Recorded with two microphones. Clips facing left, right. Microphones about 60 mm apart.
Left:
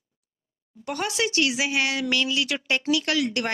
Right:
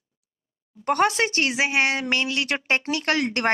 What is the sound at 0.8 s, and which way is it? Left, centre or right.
A woman's voice, right.